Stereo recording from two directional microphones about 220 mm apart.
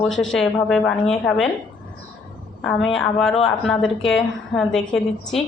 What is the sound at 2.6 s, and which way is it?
A woman's voice, centre (ahead or behind).